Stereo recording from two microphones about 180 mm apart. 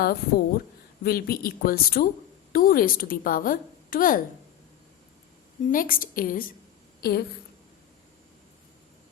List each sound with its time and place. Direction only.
0.0 s a woman's voice: 60° left (ahead or behind)
5.7 s a woman's voice: 50° left (ahead or behind)